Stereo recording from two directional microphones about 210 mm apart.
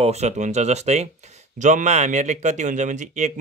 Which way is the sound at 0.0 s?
30° right (ahead or behind).